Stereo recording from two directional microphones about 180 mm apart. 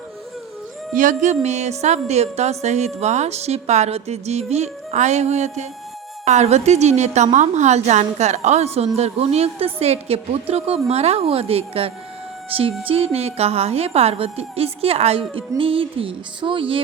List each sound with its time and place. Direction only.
0.9 s a woman's voice: 45° right (ahead or behind)